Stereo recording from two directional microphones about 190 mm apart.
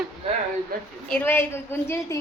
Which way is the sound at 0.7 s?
50° right (ahead or behind).